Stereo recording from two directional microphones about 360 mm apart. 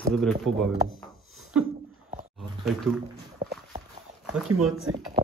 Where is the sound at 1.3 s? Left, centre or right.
Centre.